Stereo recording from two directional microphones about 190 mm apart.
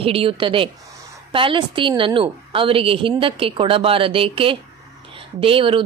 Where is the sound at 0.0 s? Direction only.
30° right (ahead or behind).